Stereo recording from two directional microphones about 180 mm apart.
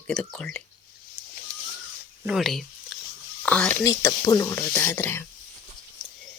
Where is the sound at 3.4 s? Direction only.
5° left (ahead or behind).